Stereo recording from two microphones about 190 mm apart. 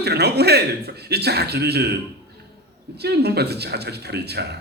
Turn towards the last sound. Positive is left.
turn(degrees=-60)  # may be behind; listen again after turning